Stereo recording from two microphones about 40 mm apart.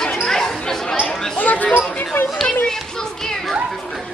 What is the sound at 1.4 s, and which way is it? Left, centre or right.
Chatter, left.